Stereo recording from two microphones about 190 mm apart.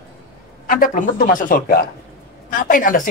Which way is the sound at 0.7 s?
45° left (ahead or behind).